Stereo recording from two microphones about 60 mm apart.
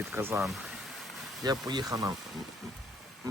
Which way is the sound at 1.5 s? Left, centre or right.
Right.